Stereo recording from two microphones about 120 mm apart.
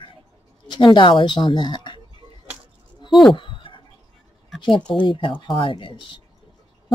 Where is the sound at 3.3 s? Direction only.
45° left (ahead or behind).